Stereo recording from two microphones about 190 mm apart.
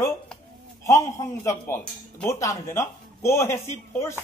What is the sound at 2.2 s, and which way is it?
A man's voice, 15° left (ahead or behind).